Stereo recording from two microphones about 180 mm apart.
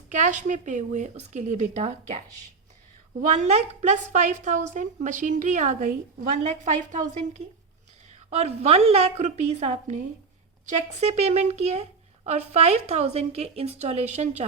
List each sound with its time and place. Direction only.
0.1 s a woman's voice: 40° right (ahead or behind)
3.2 s a woman's voice: 40° right (ahead or behind)
6.9 s a woman's voice: 40° right (ahead or behind)